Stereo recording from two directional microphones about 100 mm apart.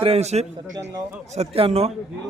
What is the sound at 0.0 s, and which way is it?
Speech, 85° right.